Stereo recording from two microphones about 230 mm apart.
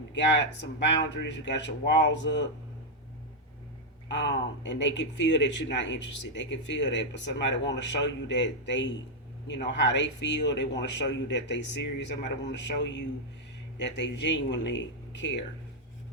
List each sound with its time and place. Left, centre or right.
0.1 s a man's voice: left
4.1 s a man's voice: left